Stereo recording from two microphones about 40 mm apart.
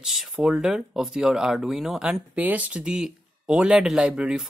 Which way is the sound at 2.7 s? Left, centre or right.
Right.